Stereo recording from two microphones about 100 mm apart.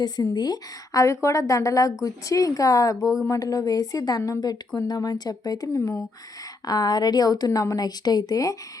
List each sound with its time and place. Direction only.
0.0 s speech: 45° left (ahead or behind)
6.7 s speech: 40° left (ahead or behind)